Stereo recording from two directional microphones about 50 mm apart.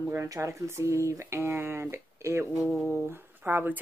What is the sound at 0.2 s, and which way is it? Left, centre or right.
A woman's voice, right.